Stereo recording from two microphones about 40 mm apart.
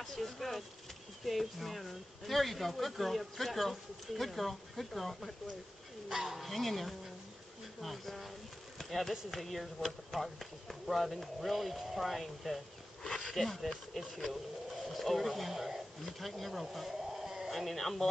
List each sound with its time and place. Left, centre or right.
0.0 s speech: centre
6.0 s speech: centre
8.7 s a sound: centre
9.1 s speech: centre
13.0 s speech: centre
16.7 s a sound: centre
17.5 s speech: centre